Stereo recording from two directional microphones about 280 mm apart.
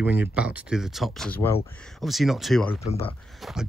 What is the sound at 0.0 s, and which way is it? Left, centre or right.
Speech, centre.